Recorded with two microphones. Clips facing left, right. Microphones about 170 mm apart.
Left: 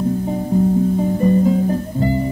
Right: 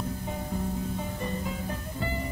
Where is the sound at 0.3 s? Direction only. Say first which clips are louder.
Left 16 dB; 35° left (ahead or behind).